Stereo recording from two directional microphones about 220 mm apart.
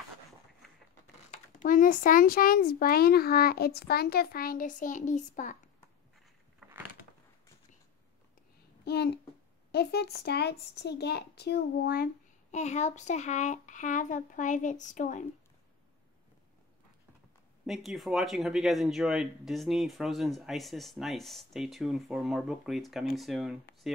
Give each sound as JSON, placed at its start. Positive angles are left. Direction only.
{"t": 1.3, "sound": "a child's voice", "side_deg": 35}
{"t": 8.8, "sound": "a sound", "side_deg": 50}
{"t": 9.7, "sound": "a child's voice", "side_deg": 50}
{"t": 17.6, "sound": "speech", "side_deg": 0}